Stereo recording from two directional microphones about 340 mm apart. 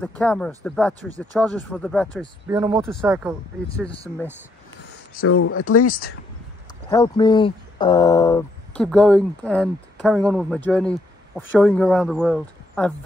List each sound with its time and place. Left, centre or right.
0.0 s speech: centre
5.2 s speech: left
5.9 s speech: left
6.9 s speech: centre